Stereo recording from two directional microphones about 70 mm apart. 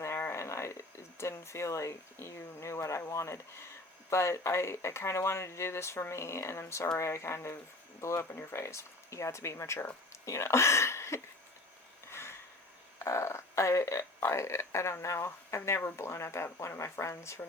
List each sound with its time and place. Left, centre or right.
0.0 s speech: left
12.1 s a sound: left
13.0 s speech: left